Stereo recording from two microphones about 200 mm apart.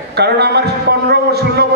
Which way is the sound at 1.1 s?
55° right (ahead or behind).